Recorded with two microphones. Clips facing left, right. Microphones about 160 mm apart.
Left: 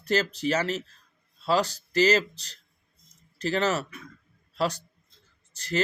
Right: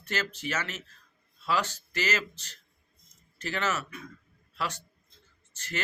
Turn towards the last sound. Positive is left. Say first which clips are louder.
# left 9 dB
turn(degrees=35)  # may be behind; listen again after turning